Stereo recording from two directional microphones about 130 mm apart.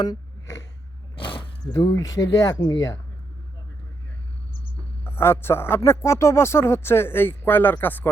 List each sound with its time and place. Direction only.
0.0 s a sound: 30° left (ahead or behind)
1.2 s speech: 35° left (ahead or behind)
5.0 s speech: 20° left (ahead or behind)